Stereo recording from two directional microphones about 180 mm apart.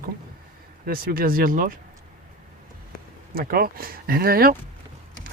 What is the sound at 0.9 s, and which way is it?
Speech, 55° right (ahead or behind).